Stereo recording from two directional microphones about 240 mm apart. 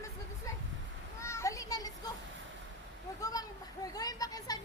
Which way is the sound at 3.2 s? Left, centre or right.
Centre.